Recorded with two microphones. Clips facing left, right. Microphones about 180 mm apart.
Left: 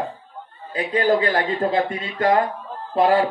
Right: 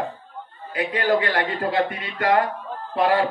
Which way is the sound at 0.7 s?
25° left (ahead or behind).